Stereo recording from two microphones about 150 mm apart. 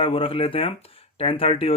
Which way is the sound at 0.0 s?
35° left (ahead or behind).